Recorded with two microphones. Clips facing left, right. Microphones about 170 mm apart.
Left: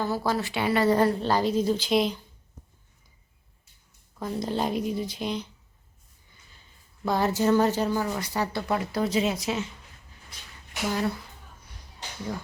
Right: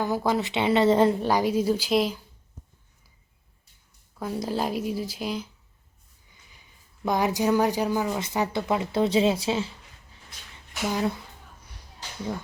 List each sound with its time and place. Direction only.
0.0 s speech: 15° right (ahead or behind)
4.2 s speech: 5° right (ahead or behind)
6.5 s speech: 15° right (ahead or behind); by 9.7 s 30° right (ahead or behind)
10.8 s speech: 15° right (ahead or behind)